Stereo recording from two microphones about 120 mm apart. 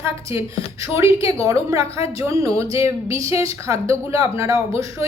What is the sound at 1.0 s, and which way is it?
Speech, 50° left (ahead or behind).